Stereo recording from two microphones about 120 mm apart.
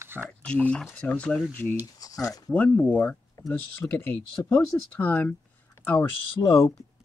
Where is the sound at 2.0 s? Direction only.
30° left (ahead or behind).